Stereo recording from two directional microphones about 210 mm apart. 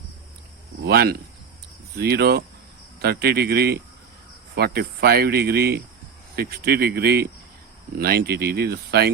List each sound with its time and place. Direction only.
0.8 s speech: 50° right (ahead or behind)